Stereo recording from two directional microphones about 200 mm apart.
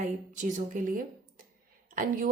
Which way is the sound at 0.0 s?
40° right (ahead or behind).